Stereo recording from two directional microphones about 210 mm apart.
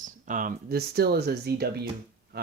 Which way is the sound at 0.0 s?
40° right (ahead or behind).